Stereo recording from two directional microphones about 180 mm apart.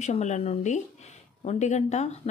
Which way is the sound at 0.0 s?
40° left (ahead or behind).